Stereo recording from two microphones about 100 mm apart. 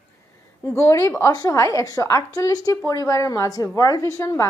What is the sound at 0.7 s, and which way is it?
A woman's voice, 25° left (ahead or behind).